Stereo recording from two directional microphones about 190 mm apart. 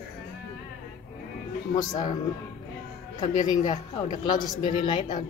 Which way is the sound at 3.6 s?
40° left (ahead or behind).